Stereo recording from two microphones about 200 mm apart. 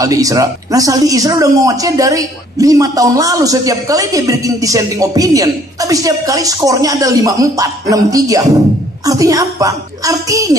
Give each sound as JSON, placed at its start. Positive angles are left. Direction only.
{"t": 0.0, "sound": "speech", "side_deg": -15}